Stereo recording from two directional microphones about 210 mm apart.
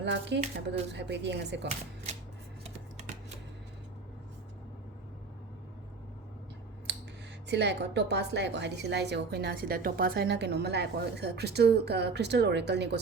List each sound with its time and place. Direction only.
0.0 s speech: 55° right (ahead or behind)
7.4 s a woman's voice: 55° right (ahead or behind)